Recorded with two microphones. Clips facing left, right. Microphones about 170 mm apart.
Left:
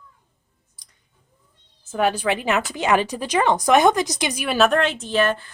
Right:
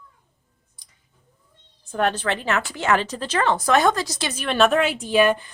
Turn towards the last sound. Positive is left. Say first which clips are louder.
# right 3 dB
turn(degrees=-15)  # may be behind; listen again after turning